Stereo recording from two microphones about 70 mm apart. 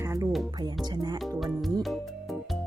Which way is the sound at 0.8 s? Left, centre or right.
Right.